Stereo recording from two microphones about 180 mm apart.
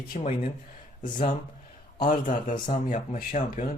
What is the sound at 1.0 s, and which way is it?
Speech, 45° left (ahead or behind).